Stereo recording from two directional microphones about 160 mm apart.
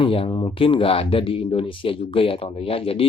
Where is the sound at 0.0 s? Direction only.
30° left (ahead or behind).